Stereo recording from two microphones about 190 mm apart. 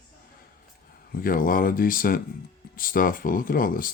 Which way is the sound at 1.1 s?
50° left (ahead or behind).